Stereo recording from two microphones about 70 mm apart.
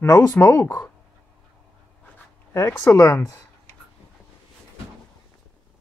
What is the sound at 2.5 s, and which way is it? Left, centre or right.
Speech, left.